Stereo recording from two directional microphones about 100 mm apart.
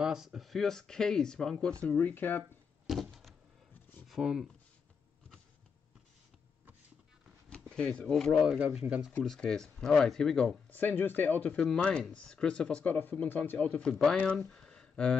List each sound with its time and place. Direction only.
0.0 s speech: 5° right (ahead or behind); by 2.4 s 20° left (ahead or behind)
2.9 s a sound: centre (ahead or behind)
4.1 s speech: 5° right (ahead or behind)
7.7 s speech: 10° left (ahead or behind); by 9.1 s 10° right (ahead or behind)
9.2 s speech: 5° left (ahead or behind)
10.7 s speech: 20° left (ahead or behind)